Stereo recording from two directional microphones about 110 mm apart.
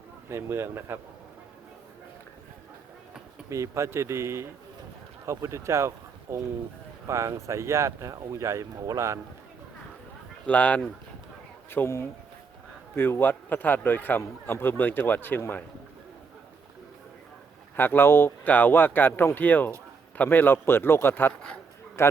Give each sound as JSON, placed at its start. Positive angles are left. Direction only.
{"t": 0.3, "sound": "speech", "side_deg": -20}
{"t": 3.5, "sound": "speech", "side_deg": -25}
{"t": 10.4, "sound": "a man's voice", "side_deg": 15}
{"t": 17.7, "sound": "a man's voice", "side_deg": 20}